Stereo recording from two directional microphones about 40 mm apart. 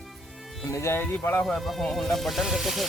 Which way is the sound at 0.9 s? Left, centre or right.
Left.